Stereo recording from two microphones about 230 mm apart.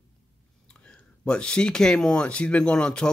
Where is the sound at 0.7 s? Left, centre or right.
Centre.